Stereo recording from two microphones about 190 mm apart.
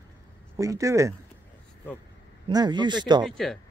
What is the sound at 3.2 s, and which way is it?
Speech, centre (ahead or behind).